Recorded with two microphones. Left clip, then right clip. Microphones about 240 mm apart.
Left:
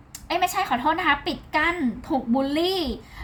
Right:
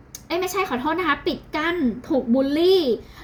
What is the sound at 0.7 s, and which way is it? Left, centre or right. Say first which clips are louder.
A woman's voice: left 1 dB; left.